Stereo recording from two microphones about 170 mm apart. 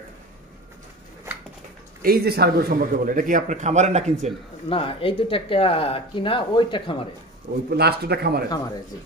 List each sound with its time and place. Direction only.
2.0 s a man's voice: 65° right (ahead or behind); by 4.3 s 45° right (ahead or behind)
4.6 s speech: 30° left (ahead or behind)
7.7 s a man's voice: 70° right (ahead or behind)